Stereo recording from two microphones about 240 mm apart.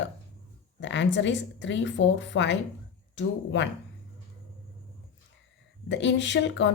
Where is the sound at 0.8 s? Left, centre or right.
Left.